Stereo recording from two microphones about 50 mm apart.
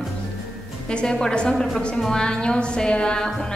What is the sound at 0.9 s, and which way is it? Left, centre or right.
A woman's voice, centre.